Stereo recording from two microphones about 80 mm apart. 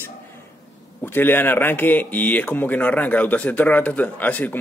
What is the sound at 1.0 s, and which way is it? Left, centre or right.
Speech, left.